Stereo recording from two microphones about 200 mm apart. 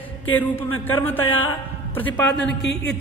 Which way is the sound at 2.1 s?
60° left (ahead or behind).